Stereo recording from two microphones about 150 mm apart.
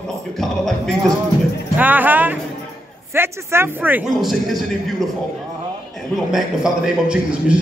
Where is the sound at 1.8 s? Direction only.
10° right (ahead or behind).